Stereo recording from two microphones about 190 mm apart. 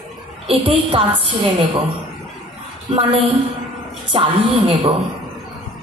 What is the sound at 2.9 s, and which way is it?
Music, 30° right (ahead or behind).